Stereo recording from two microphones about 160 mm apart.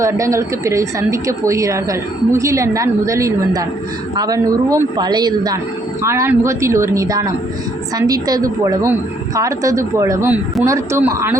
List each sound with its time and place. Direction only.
0.0 s a woman's voice: 20° right (ahead or behind)